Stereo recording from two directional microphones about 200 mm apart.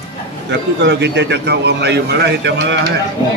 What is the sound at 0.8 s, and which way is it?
A man's voice, 60° right (ahead or behind).